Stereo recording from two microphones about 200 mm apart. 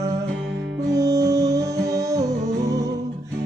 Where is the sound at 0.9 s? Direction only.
15° right (ahead or behind).